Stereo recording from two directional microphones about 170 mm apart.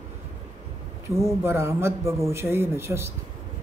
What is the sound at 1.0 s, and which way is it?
Speech, 15° right (ahead or behind).